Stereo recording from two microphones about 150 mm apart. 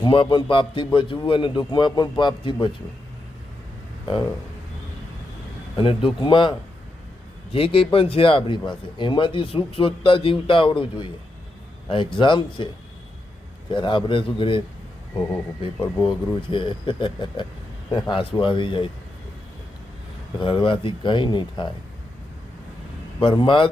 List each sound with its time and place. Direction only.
0.0 s speech: 35° left (ahead or behind)
5.7 s speech: 35° left (ahead or behind)
13.7 s speech: 35° left (ahead or behind)
15.6 s speech: 35° left (ahead or behind)
20.4 s speech: 35° left (ahead or behind)
23.2 s speech: 35° left (ahead or behind)